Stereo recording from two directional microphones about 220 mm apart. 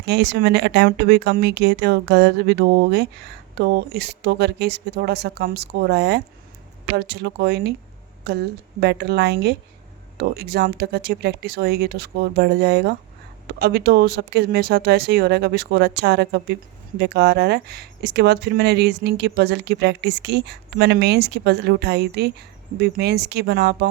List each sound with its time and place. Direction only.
0.0 s speech: 50° right (ahead or behind)